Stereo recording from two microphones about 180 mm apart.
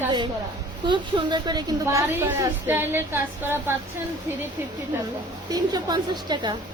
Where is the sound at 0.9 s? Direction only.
25° right (ahead or behind).